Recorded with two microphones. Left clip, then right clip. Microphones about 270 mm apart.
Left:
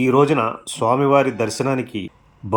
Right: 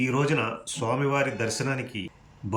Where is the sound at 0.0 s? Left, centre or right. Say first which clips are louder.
Left 10 dB; centre.